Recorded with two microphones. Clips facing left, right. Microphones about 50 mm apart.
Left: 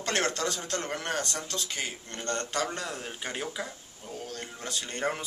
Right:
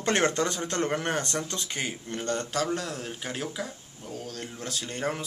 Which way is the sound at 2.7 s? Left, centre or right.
Centre.